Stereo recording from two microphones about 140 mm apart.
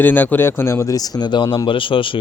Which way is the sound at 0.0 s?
15° left (ahead or behind).